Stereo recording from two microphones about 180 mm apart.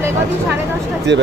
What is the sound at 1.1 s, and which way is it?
Speech, 80° right.